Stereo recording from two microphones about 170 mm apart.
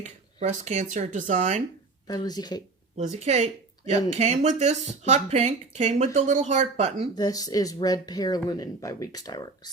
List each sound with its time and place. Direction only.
0.0 s speech: 45° right (ahead or behind)
2.0 s speech: 25° left (ahead or behind)
2.9 s speech: 40° right (ahead or behind)
7.2 s speech: 20° left (ahead or behind)